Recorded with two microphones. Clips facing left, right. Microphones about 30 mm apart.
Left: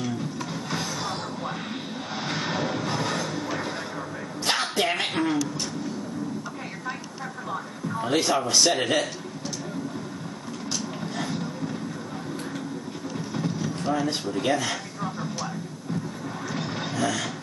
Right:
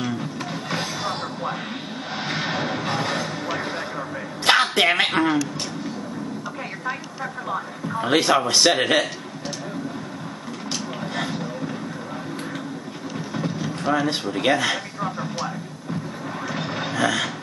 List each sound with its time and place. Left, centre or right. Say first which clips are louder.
0.0 s music: right 3 dB; right
2.2 s music: right 2 dB; right
4.5 s speech: right 7 dB; right
8.1 s a man's voice: right 5 dB; right
11.1 s a sound: right 3 dB; right
13.4 s speech: right 2 dB; right
15.0 s vehicle: right 4 dB; right
16.9 s vehicle: right 5 dB; right